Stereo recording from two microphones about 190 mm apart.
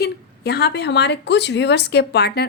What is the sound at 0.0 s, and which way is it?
Speech, 60° left (ahead or behind).